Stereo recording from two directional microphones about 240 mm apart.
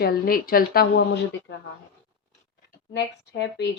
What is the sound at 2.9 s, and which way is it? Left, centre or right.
Speech, left.